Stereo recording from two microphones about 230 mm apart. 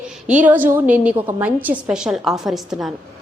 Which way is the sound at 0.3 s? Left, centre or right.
Centre.